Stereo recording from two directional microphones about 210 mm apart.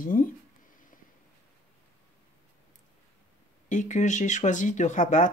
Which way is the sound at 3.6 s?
35° left (ahead or behind).